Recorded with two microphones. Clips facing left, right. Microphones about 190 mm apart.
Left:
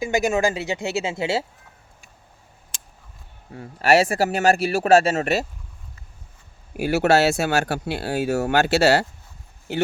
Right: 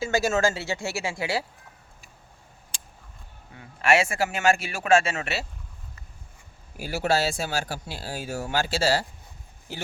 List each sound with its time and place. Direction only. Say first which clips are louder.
0.0 s speech: left 3 dB; 15° left (ahead or behind)
3.5 s speech: left 5 dB; 40° left (ahead or behind)
6.7 s speech: left 7 dB; 70° left (ahead or behind)